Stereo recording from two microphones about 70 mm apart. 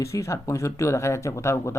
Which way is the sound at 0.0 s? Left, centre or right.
Left.